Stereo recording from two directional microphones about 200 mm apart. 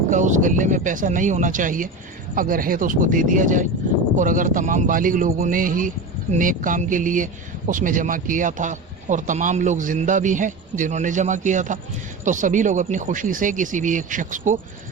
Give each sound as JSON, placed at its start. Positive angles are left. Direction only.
{"t": 0.1, "sound": "a man's voice", "side_deg": -40}